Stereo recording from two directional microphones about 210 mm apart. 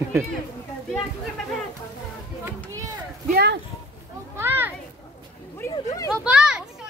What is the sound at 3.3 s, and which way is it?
Speech, 50° right (ahead or behind).